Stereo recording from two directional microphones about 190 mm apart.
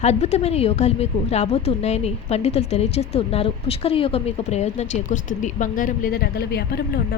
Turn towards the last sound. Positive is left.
turn(degrees=60)  # may be behind; listen again after turning